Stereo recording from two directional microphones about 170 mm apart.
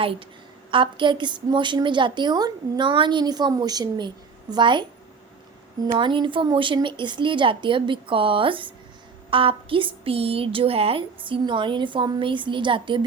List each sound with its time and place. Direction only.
0.0 s a woman's voice: 30° right (ahead or behind)
6.0 s a woman's voice: 30° right (ahead or behind)